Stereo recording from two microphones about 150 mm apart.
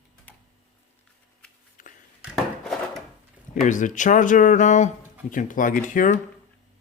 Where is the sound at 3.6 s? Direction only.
60° left (ahead or behind).